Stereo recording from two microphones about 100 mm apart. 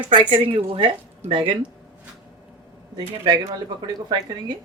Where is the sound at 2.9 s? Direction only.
45° right (ahead or behind).